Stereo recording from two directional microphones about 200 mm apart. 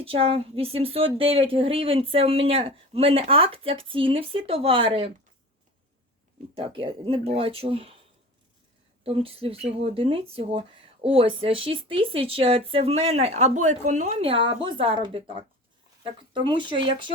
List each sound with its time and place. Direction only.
0.0 s speech: 30° right (ahead or behind)
6.5 s speech: 25° right (ahead or behind)
9.0 s speech: 30° right (ahead or behind)